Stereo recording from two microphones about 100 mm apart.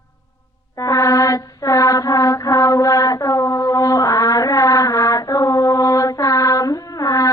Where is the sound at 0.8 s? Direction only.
35° left (ahead or behind).